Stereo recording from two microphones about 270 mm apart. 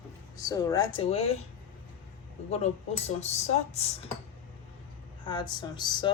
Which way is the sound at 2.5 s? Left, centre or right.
Left.